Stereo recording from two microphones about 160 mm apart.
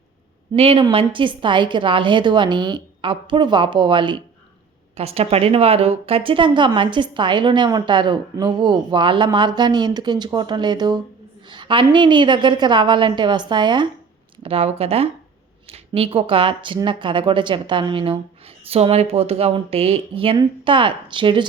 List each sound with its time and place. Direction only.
0.5 s a woman's voice: 35° right (ahead or behind)